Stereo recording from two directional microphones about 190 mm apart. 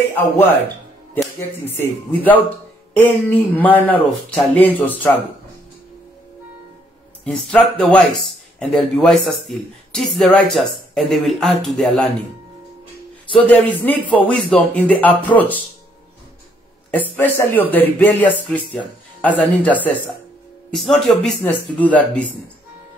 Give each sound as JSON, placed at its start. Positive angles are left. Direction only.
{"t": 0.1, "sound": "speech", "side_deg": 10}
{"t": 7.2, "sound": "speech", "side_deg": 0}
{"t": 13.4, "sound": "speech", "side_deg": 10}
{"t": 16.9, "sound": "speech", "side_deg": 10}